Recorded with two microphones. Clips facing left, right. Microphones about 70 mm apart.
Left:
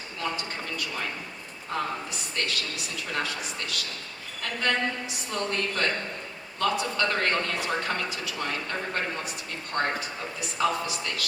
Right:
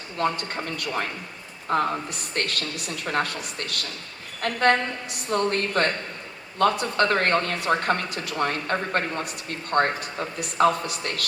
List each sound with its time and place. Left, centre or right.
0.2 s a man's voice: right